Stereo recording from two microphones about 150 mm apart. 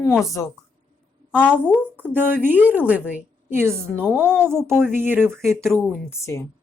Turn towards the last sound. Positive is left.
turn(degrees=20)  # may be behind; listen again after turning